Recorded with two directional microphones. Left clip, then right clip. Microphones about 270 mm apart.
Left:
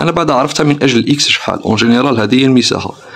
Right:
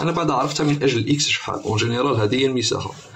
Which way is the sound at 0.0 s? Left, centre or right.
Left.